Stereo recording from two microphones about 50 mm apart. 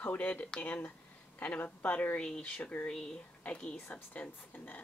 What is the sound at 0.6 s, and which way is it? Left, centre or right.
Speech, left.